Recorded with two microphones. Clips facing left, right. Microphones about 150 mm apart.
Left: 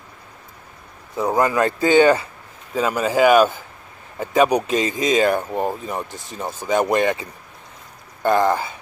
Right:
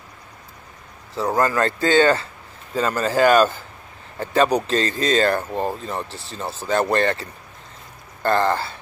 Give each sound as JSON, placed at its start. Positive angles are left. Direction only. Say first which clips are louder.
{"t": 1.1, "sound": "speech", "louder": "left 2 dB", "side_deg": 15}